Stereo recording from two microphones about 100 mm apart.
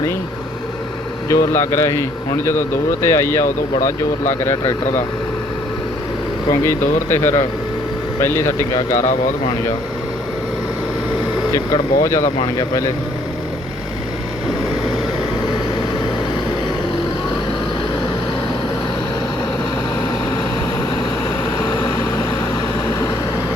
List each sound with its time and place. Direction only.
1.3 s speech: 30° left (ahead or behind)
6.5 s speech: 25° left (ahead or behind)
11.5 s speech: 35° left (ahead or behind)
21.6 s vehicle: 45° left (ahead or behind)